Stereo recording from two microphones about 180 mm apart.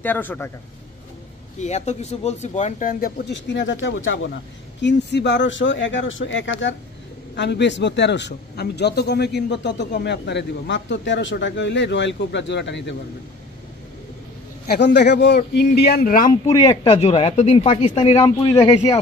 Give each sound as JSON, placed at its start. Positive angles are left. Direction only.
{"t": 0.0, "sound": "a man's voice", "side_deg": 10}
{"t": 1.6, "sound": "speech", "side_deg": 40}
{"t": 3.3, "sound": "speech", "side_deg": 80}
{"t": 4.8, "sound": "speech", "side_deg": 75}
{"t": 7.3, "sound": "a man's voice", "side_deg": 70}
{"t": 15.0, "sound": "a man's voice", "side_deg": 70}
{"t": 16.6, "sound": "speech", "side_deg": 30}